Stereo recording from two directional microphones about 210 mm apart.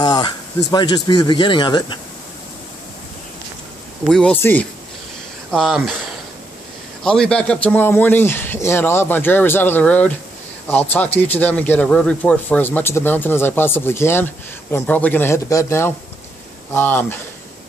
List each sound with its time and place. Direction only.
0.0 s speech: 20° left (ahead or behind)
4.1 s speech: 5° left (ahead or behind)
7.0 s speech: 5° left (ahead or behind)